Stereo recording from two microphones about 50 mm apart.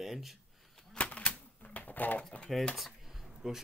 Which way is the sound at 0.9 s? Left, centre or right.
Left.